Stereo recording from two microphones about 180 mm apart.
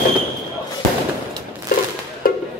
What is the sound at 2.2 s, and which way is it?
Music, 55° left (ahead or behind).